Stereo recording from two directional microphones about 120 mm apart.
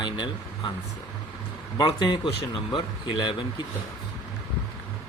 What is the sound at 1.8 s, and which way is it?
Speech, 35° left (ahead or behind).